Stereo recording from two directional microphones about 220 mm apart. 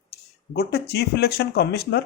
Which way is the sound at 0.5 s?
50° left (ahead or behind).